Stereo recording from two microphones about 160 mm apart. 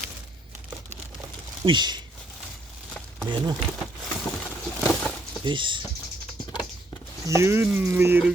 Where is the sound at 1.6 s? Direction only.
30° right (ahead or behind).